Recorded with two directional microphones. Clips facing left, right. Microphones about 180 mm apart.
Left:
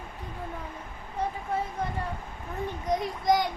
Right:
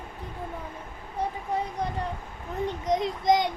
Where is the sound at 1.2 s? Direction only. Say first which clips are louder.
Right 1 dB; 10° right (ahead or behind).